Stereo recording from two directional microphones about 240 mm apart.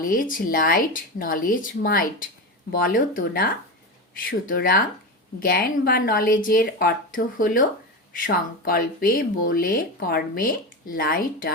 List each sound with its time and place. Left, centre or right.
0.0 s speech: left
8.6 s speech: left